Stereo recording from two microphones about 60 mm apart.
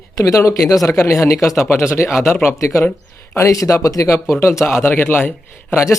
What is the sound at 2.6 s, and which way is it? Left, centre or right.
Speech, left.